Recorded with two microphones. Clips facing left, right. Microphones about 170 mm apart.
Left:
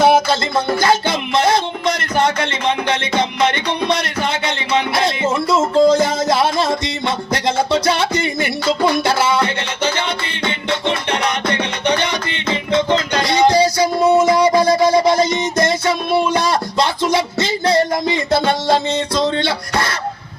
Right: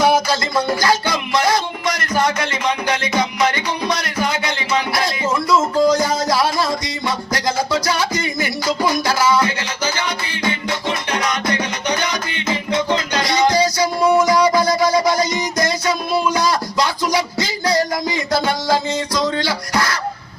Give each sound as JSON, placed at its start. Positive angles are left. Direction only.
{"t": 0.3, "sound": "music", "side_deg": 25}
{"t": 13.2, "sound": "a sound", "side_deg": 30}
{"t": 19.5, "sound": "music", "side_deg": 25}